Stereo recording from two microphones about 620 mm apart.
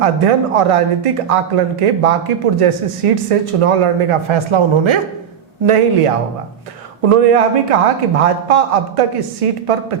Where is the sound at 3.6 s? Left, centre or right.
Right.